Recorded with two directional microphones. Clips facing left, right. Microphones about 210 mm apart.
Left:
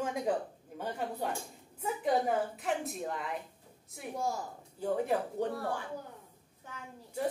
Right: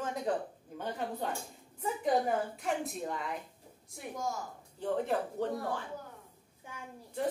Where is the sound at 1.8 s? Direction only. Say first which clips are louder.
Even; centre (ahead or behind).